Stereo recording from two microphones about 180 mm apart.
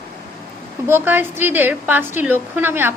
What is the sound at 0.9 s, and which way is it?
A woman's voice, 10° right (ahead or behind).